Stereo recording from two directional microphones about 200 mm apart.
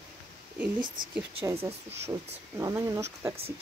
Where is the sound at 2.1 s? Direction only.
15° right (ahead or behind).